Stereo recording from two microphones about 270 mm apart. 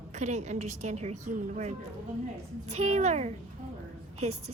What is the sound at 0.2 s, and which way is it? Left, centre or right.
A woman's voice, right.